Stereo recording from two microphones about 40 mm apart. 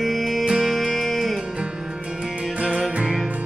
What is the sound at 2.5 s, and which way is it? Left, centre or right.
Music, right.